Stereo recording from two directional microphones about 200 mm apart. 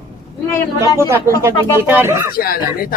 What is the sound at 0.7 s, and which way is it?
Speech, 15° right (ahead or behind).